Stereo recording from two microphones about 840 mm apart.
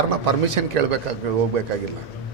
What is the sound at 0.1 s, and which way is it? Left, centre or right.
A man's voice, right.